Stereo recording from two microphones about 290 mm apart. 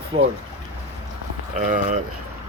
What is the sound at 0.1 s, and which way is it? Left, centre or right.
Speech, centre.